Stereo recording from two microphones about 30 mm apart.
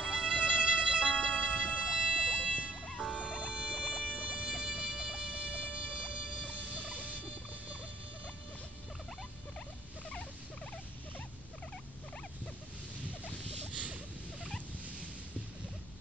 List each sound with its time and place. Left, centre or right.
0.1 s music: right
1.5 s music: left
1.8 s music: right
4.6 s music: right
5.6 s music: left
6.8 s a sound: left
13.7 s a sound: right